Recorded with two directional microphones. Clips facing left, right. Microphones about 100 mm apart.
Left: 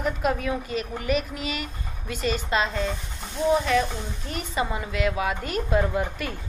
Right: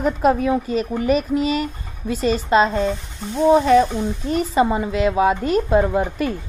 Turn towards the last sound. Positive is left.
turn(degrees=-30)  # may be behind; listen again after turning